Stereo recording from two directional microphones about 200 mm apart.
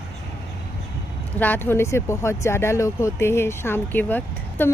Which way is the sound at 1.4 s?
10° left (ahead or behind).